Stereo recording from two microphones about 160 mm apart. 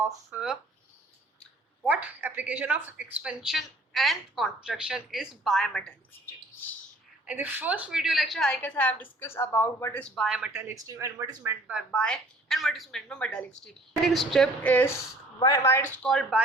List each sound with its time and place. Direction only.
0.0 s speech: 10° right (ahead or behind)
1.8 s a woman's voice: 10° right (ahead or behind)
7.3 s a woman's voice: 10° right (ahead or behind); by 10.2 s 10° left (ahead or behind)
10.2 s a woman's voice: 5° right (ahead or behind)
10.5 s speech: 15° right (ahead or behind)
11.7 s a woman's voice: centre (ahead or behind)
15.4 s a woman's voice: 20° left (ahead or behind)
16.0 s a woman's voice: centre (ahead or behind)